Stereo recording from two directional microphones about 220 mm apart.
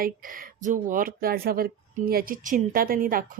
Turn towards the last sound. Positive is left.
turn(degrees=-40)  # may be behind; listen again after turning